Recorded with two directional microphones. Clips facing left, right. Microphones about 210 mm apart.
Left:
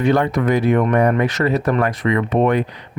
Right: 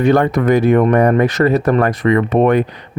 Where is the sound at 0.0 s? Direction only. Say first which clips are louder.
Right 4 dB; 45° right (ahead or behind).